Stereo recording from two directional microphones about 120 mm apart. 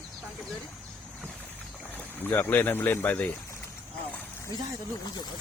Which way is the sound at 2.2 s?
15° left (ahead or behind).